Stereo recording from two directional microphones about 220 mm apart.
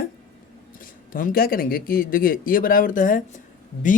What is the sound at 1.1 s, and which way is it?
Speech, 40° left (ahead or behind).